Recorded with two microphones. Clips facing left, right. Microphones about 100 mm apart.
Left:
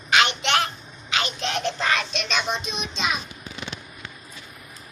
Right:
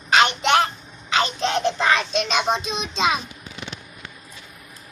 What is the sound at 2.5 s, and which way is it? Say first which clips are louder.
Speech: right 5 dB; 30° right (ahead or behind).